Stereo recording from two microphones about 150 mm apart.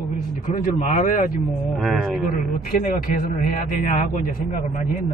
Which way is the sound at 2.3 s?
65° left (ahead or behind).